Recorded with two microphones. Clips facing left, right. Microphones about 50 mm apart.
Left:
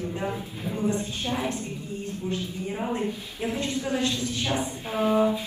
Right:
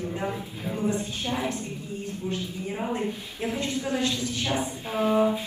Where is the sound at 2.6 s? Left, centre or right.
Centre.